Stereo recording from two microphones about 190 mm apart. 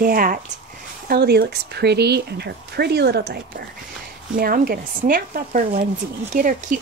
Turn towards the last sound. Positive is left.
turn(degrees=-45)  # may be behind; listen again after turning